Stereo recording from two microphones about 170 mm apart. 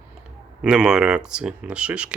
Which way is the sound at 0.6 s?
5° right (ahead or behind).